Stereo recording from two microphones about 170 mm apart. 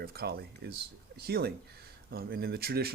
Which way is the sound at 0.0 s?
65° right (ahead or behind).